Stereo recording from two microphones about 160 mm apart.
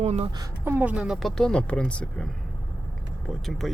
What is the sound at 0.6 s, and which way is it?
Speech, 15° right (ahead or behind).